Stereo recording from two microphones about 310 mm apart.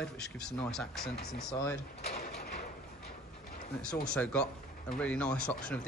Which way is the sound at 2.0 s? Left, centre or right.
Left.